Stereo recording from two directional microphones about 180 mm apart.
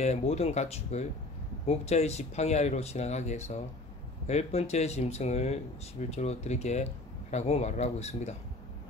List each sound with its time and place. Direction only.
0.0 s speech: 35° left (ahead or behind)